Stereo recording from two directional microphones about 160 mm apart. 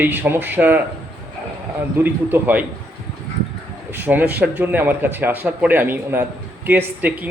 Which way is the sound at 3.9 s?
10° right (ahead or behind).